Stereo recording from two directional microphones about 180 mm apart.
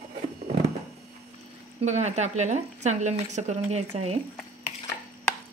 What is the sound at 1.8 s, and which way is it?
Speech, 40° right (ahead or behind).